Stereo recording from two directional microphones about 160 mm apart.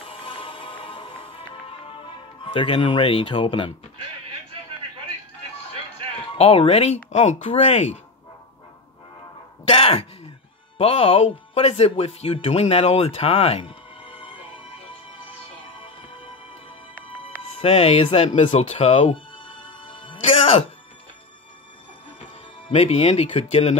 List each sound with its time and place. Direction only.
0.0 s music: 35° left (ahead or behind)
6.3 s speech: 40° left (ahead or behind)
9.7 s a sound: 35° left (ahead or behind)
10.8 s speech: 35° left (ahead or behind)
15.8 s music: 35° left (ahead or behind)
17.2 s speech: 35° left (ahead or behind)
19.8 s music: 30° left (ahead or behind)
22.7 s speech: 40° left (ahead or behind)